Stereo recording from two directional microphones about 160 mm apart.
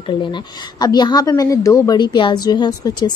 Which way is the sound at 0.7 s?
25° left (ahead or behind).